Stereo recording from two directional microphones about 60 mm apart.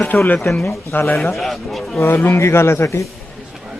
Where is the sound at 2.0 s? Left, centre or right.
Left.